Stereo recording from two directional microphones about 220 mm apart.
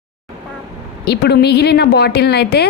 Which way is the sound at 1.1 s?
50° left (ahead or behind).